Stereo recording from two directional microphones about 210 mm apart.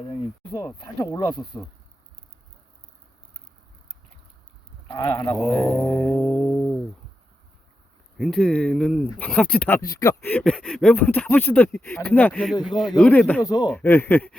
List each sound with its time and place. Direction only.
0.1 s speech: 20° left (ahead or behind)
4.9 s speech: 20° left (ahead or behind)
5.5 s speech: 10° left (ahead or behind)
6.2 s a sound: centre (ahead or behind)
8.2 s speech: centre (ahead or behind)
13.4 s speech: 15° left (ahead or behind)